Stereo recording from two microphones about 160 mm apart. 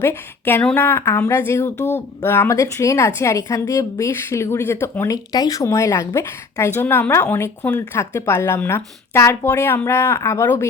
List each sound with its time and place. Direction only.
0.0 s a woman's voice: 15° left (ahead or behind)